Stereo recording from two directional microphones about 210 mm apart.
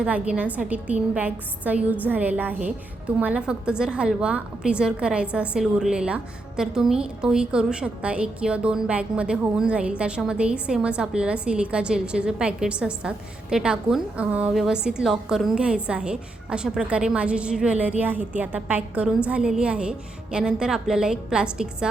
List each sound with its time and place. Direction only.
0.0 s a woman's voice: 5° right (ahead or behind)